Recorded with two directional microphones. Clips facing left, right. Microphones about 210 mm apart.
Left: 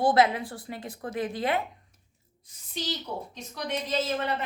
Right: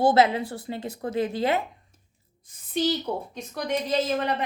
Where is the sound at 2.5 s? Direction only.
55° right (ahead or behind).